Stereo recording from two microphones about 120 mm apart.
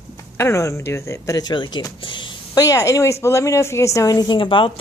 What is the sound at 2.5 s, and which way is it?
A woman's voice, 30° left (ahead or behind).